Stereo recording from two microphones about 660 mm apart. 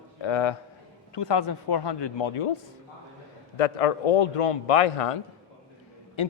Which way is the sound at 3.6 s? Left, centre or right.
Left.